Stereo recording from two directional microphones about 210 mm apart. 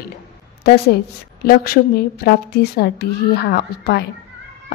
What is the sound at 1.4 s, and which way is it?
A woman's voice, 45° left (ahead or behind).